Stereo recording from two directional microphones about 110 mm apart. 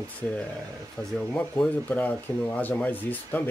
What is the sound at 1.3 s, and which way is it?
A man's voice, 10° left (ahead or behind).